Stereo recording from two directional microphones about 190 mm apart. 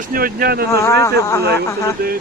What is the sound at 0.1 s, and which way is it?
Speech, 50° right (ahead or behind).